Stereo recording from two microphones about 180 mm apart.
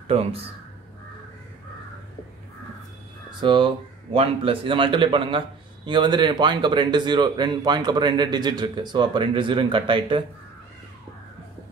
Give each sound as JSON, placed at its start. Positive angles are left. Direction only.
{"t": 0.1, "sound": "speech", "side_deg": -35}
{"t": 3.3, "sound": "speech", "side_deg": -25}